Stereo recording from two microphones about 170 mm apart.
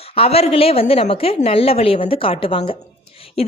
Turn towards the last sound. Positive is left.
turn(degrees=35)  # may be behind; listen again after turning